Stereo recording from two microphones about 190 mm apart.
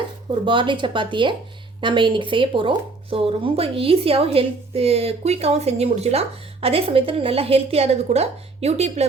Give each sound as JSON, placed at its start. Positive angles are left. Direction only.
{"t": 0.3, "sound": "speech", "side_deg": -25}